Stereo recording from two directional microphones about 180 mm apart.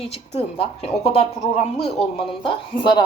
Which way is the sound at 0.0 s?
35° left (ahead or behind).